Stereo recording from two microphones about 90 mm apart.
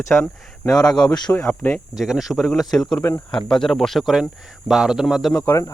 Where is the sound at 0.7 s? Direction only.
50° left (ahead or behind).